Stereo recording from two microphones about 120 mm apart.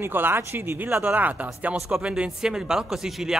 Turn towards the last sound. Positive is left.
turn(degrees=-5)  # may be behind; listen again after turning